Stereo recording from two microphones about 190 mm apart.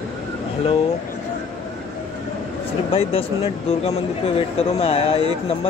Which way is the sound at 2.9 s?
30° left (ahead or behind).